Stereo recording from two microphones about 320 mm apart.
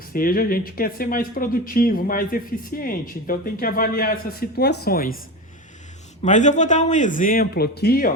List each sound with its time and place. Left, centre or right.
0.1 s speech: left
6.2 s speech: left